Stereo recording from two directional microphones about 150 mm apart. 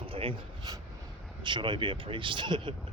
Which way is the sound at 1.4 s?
30° right (ahead or behind).